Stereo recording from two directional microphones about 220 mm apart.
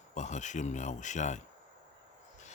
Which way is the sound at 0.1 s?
35° left (ahead or behind).